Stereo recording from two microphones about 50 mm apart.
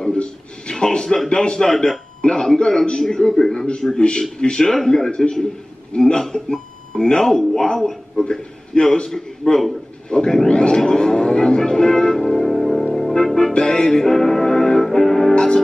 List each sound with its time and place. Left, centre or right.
0.0 s a man's voice: centre
10.5 s a sound: centre
10.8 s speech: centre
12.9 s music: centre